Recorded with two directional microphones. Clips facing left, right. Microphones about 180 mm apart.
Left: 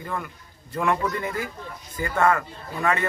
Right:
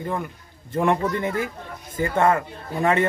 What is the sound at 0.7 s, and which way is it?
A man's voice, 30° right (ahead or behind).